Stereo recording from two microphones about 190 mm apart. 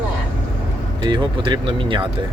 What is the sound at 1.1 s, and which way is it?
Speech, 25° right (ahead or behind).